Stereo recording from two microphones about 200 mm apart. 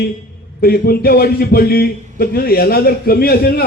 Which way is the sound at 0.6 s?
50° left (ahead or behind).